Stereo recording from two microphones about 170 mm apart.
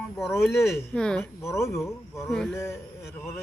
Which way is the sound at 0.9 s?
5° left (ahead or behind).